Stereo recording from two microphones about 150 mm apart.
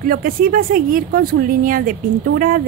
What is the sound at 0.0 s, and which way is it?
Speech, 70° right (ahead or behind).